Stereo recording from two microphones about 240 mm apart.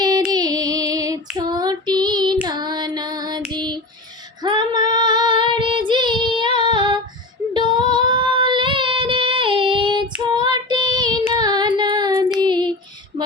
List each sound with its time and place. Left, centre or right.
0.3 s female singing: centre
1.4 s child singing: centre